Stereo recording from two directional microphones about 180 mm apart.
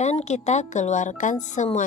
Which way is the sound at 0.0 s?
40° left (ahead or behind).